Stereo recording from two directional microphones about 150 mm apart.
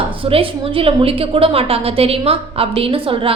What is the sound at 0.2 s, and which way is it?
A woman's voice, 40° right (ahead or behind).